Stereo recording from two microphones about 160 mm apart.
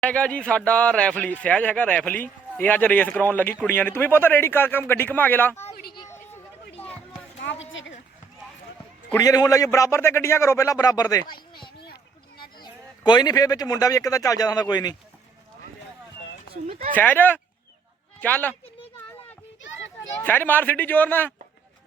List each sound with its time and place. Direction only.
0.0 s speech: 5° left (ahead or behind)
6.1 s a sound: 15° left (ahead or behind)
9.1 s a man's voice: 20° left (ahead or behind)
13.1 s a man's voice: 25° left (ahead or behind)
16.9 s speech: 10° left (ahead or behind)
20.2 s speech: 10° left (ahead or behind)